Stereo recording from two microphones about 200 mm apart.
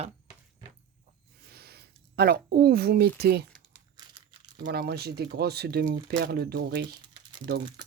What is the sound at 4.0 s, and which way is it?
Crumpling, 20° right (ahead or behind).